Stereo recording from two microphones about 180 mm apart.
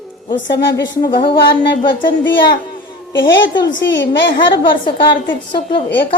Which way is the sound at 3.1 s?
90° left.